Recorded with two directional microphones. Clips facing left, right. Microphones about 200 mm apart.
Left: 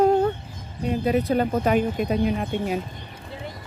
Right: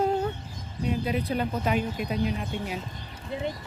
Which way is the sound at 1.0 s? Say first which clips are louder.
Left 10 dB; 45° left (ahead or behind).